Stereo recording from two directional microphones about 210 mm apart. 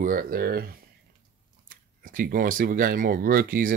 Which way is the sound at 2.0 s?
40° right (ahead or behind).